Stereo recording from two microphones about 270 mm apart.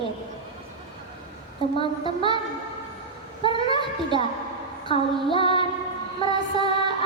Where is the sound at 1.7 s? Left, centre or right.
Centre.